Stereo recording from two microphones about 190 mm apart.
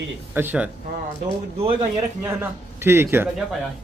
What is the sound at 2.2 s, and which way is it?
Speech, 10° right (ahead or behind).